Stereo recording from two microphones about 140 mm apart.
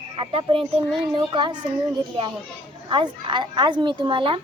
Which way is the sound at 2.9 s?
35° right (ahead or behind).